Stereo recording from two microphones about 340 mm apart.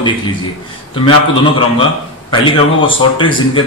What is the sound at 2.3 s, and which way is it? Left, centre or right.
A man's voice, centre.